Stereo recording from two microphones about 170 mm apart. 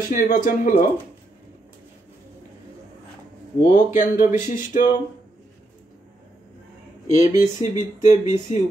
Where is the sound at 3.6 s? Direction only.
50° left (ahead or behind).